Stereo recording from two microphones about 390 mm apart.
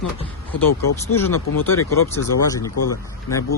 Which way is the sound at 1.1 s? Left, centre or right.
Centre.